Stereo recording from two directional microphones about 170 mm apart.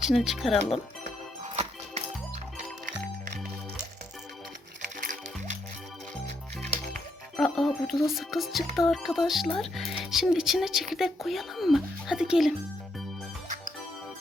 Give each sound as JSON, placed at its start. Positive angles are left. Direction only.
{"t": 0.0, "sound": "speech", "side_deg": 0}
{"t": 1.5, "sound": "music", "side_deg": -40}
{"t": 4.9, "sound": "music", "side_deg": -50}
{"t": 7.3, "sound": "speech", "side_deg": 0}